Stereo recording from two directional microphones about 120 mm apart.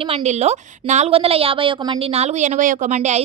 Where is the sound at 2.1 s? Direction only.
65° right (ahead or behind).